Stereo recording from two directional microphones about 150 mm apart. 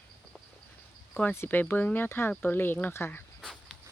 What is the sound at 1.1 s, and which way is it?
Speech, 15° left (ahead or behind).